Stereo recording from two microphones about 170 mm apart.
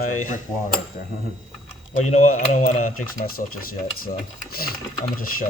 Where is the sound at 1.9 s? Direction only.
45° left (ahead or behind).